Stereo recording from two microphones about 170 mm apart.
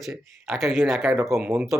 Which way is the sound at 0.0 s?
Centre (ahead or behind).